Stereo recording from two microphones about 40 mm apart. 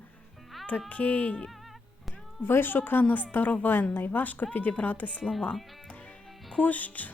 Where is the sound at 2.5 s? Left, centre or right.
Left.